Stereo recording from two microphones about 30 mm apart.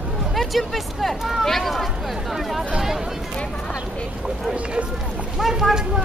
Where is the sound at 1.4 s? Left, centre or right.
Centre.